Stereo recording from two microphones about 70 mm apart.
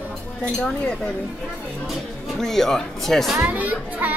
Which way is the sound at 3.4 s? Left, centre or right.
Right.